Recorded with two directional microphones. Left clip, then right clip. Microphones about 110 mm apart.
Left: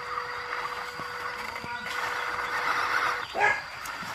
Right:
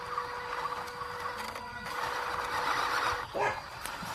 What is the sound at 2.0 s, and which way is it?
Vehicle, 50° right (ahead or behind).